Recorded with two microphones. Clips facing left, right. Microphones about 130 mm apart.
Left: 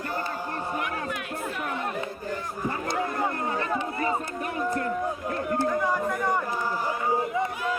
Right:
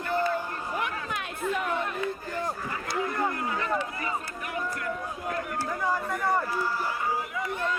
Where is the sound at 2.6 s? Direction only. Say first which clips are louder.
Left 4 dB; 20° left (ahead or behind).